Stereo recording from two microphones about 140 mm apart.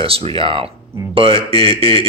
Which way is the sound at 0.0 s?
40° right (ahead or behind).